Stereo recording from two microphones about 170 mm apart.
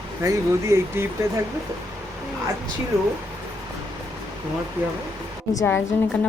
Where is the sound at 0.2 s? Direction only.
20° right (ahead or behind).